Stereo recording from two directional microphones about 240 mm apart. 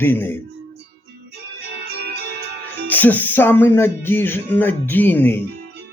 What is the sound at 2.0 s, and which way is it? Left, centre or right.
Music, right.